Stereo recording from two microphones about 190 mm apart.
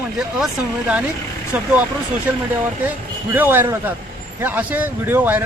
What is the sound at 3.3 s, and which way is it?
Speech, 10° right (ahead or behind).